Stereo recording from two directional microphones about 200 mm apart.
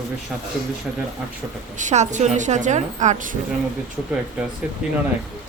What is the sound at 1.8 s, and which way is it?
A woman's voice, 35° right (ahead or behind).